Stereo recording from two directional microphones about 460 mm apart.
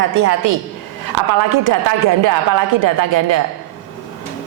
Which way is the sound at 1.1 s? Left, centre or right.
Right.